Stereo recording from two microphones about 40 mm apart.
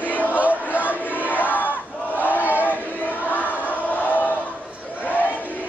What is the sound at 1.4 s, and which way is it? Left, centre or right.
Battle cry, left.